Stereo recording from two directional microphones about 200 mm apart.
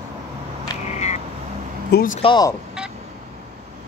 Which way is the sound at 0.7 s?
20° left (ahead or behind).